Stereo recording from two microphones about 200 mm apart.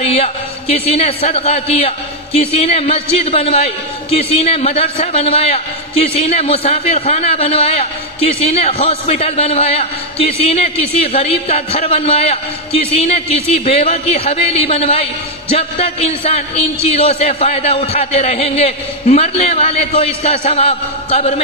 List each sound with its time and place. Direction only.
0.0 s a man's voice: 30° left (ahead or behind)